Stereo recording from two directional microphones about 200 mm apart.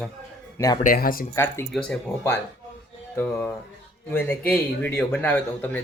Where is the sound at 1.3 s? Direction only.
15° left (ahead or behind).